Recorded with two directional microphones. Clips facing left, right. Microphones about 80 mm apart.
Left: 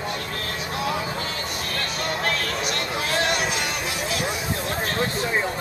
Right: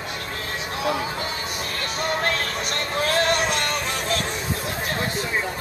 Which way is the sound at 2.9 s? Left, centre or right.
Right.